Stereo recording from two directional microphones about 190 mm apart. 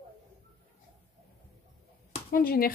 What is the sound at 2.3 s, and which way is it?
Speech, 50° left (ahead or behind).